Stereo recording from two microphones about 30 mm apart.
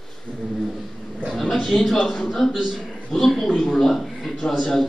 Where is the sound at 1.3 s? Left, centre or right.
Centre.